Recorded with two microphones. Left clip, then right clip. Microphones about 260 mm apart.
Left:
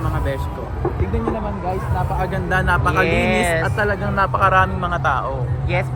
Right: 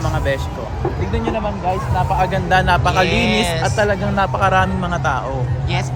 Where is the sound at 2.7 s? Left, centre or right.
Right.